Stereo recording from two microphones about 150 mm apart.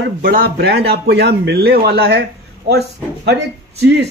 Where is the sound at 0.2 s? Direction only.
75° right (ahead or behind).